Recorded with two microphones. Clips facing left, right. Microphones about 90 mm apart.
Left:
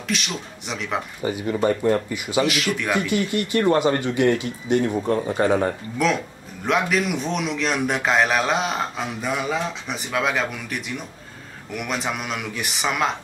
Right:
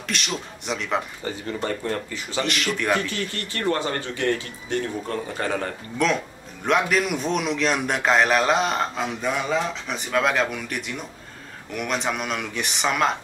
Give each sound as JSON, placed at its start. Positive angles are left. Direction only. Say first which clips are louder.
{"t": 0.1, "sound": "a man's voice", "louder": "left 1 dB", "side_deg": 0}
{"t": 1.2, "sound": "speech", "louder": "left 7 dB", "side_deg": 15}
{"t": 3.0, "sound": "speech", "louder": "left 6 dB", "side_deg": 15}
{"t": 6.0, "sound": "a man's voice", "louder": "left 1 dB", "side_deg": 5}